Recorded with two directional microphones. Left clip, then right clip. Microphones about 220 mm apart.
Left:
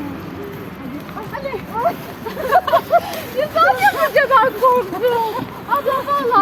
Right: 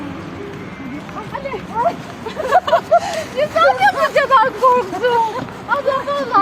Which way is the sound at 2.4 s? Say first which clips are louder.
Right 1 dB; 5° right (ahead or behind).